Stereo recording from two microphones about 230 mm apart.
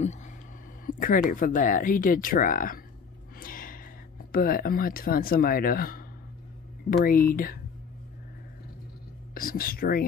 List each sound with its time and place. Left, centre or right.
0.8 s speech: left
3.3 s gasp: left
4.3 s speech: left
9.3 s speech: left